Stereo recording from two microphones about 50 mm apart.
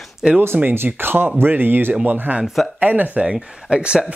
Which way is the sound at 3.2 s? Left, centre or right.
Centre.